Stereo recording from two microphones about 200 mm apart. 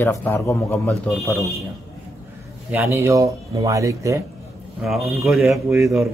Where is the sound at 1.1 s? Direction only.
Centre (ahead or behind).